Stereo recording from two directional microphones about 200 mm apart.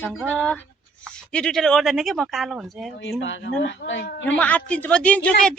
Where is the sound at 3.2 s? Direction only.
65° left (ahead or behind).